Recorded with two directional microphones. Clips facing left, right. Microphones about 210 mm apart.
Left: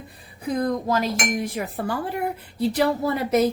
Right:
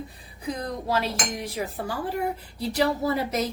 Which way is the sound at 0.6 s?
45° left (ahead or behind).